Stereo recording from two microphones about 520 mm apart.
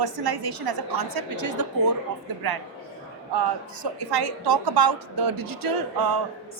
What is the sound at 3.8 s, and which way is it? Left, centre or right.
A woman's voice, right.